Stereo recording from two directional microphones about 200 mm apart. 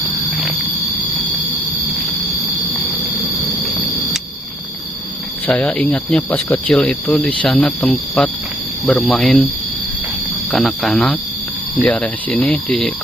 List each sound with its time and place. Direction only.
5.5 s speech: 5° left (ahead or behind)
10.5 s speech: centre (ahead or behind)